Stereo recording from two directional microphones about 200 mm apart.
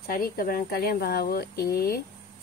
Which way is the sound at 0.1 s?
45° left (ahead or behind).